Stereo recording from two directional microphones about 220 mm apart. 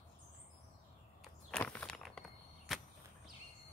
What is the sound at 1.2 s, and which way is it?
Walk, 5° left (ahead or behind).